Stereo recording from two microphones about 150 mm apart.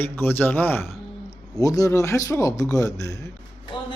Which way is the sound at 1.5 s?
25° left (ahead or behind).